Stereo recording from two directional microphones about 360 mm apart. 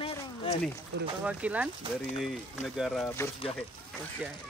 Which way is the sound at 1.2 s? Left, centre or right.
Centre.